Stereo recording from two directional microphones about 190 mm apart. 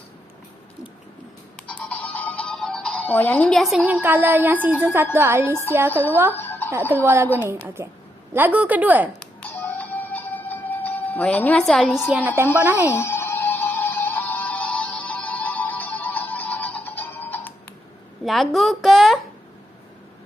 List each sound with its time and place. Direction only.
1.6 s music: 5° left (ahead or behind)
4.0 s speech: 10° right (ahead or behind)
5.9 s speech: 10° left (ahead or behind)
6.3 s music: 10° left (ahead or behind)
7.0 s speech: 15° right (ahead or behind)
9.4 s music: 10° left (ahead or behind)
12.0 s a woman's voice: centre (ahead or behind)
12.9 s music: 15° left (ahead or behind)
18.3 s a woman's voice: centre (ahead or behind)